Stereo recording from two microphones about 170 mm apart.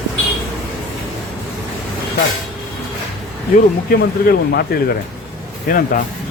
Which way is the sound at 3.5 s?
60° left (ahead or behind).